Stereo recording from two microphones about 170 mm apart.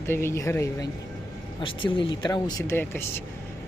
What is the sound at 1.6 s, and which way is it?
Speech, 30° left (ahead or behind).